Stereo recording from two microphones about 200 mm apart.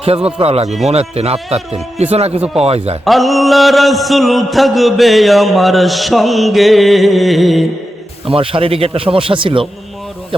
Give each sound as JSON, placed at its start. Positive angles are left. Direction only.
{"t": 0.0, "sound": "a man's voice", "side_deg": -30}
{"t": 3.0, "sound": "mantra", "side_deg": 0}
{"t": 8.3, "sound": "speech", "side_deg": -25}